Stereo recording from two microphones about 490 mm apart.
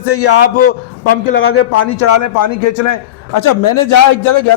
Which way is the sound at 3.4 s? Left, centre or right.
Left.